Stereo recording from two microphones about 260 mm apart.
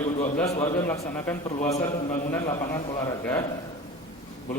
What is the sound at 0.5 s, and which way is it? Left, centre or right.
Speech, left.